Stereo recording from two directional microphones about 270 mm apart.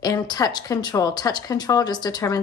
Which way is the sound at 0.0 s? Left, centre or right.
Centre.